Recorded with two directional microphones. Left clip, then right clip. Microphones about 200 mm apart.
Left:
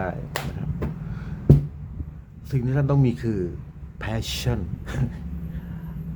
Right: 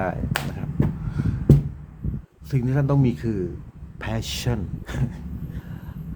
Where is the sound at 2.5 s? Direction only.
10° right (ahead or behind).